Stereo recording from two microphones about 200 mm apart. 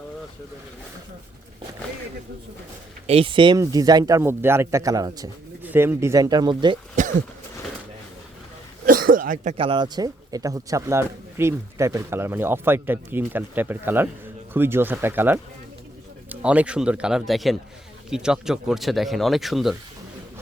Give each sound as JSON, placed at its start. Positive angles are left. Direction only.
{"t": 3.1, "sound": "speech", "side_deg": -25}
{"t": 7.0, "sound": "a sound", "side_deg": -40}
{"t": 8.9, "sound": "speech", "side_deg": -45}